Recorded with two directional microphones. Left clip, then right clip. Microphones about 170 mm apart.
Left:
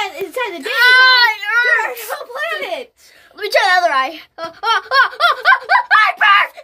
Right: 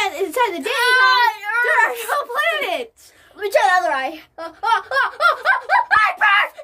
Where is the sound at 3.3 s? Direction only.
45° left (ahead or behind).